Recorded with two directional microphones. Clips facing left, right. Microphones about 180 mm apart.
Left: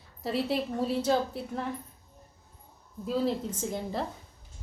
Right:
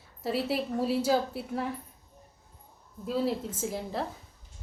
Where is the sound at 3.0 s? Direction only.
5° right (ahead or behind).